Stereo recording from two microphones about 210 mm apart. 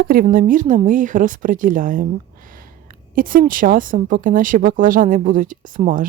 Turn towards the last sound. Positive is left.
turn(degrees=-40)  # may be behind; listen again after turning